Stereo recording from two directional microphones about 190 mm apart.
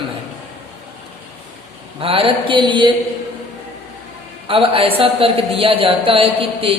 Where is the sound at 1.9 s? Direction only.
30° right (ahead or behind).